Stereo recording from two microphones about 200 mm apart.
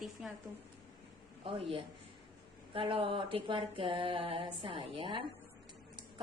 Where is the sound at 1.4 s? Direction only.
25° right (ahead or behind).